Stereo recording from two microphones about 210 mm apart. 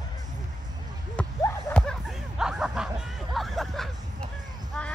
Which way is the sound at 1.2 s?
5° left (ahead or behind).